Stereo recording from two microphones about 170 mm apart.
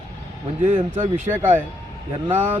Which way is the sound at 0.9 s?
10° right (ahead or behind).